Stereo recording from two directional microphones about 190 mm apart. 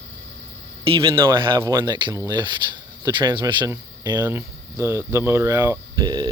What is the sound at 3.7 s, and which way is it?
Speech, 10° right (ahead or behind).